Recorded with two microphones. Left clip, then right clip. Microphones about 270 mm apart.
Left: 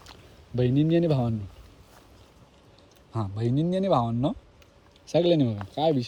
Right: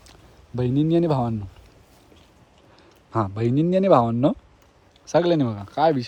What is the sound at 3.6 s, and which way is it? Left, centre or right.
Speech, centre.